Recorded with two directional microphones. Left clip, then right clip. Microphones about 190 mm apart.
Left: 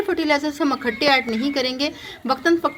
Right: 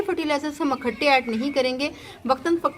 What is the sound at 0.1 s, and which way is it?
A woman's voice, 20° left (ahead or behind).